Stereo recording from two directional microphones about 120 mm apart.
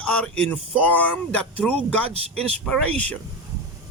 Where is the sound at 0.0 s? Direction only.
10° left (ahead or behind).